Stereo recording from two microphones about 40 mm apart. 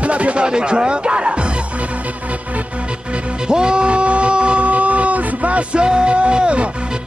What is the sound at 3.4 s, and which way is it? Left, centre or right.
Music, centre.